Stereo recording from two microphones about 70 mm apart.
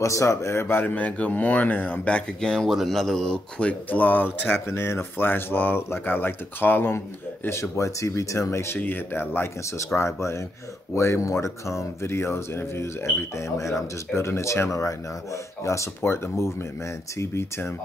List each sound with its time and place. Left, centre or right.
0.0 s speech: left
9.9 s speech: left